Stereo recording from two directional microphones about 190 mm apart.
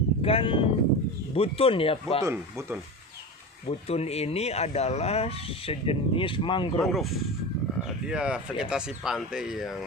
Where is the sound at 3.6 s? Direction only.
35° left (ahead or behind).